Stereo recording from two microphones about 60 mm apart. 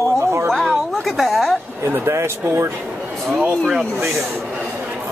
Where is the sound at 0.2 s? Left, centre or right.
Right.